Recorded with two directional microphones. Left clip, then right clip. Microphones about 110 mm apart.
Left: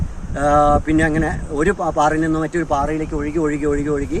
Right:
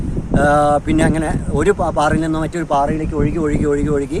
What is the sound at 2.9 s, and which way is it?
Speech, 35° right (ahead or behind).